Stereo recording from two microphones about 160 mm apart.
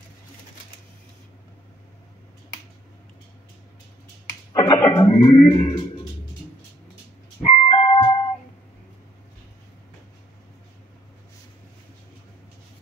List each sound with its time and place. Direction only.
4.6 s music: 25° left (ahead or behind)
7.4 s music: 30° left (ahead or behind)